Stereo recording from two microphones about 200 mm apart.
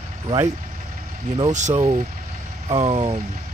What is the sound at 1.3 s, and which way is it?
Speech, 35° right (ahead or behind).